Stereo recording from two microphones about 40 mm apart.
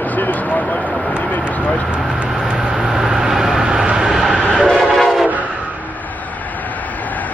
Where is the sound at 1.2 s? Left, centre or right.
Left.